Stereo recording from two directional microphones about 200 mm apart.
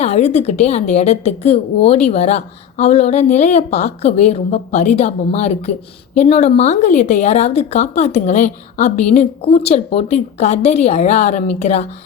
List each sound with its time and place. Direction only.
0.0 s a woman's voice: 35° left (ahead or behind)